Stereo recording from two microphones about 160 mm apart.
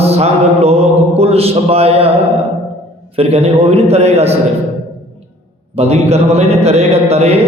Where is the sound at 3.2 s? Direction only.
40° right (ahead or behind).